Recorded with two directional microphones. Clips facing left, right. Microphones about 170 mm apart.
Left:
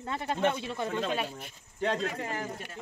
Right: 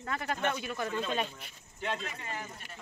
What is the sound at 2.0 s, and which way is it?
Speech, 90° left.